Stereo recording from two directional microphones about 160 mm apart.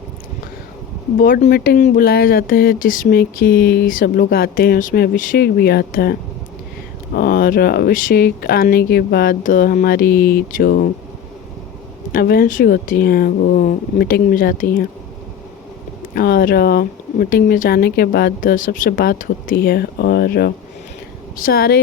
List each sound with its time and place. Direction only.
1.2 s speech: 60° left (ahead or behind)
7.2 s speech: 65° left (ahead or behind)
12.1 s speech: 65° left (ahead or behind)
16.1 s speech: 70° left (ahead or behind)
21.3 s speech: 65° left (ahead or behind)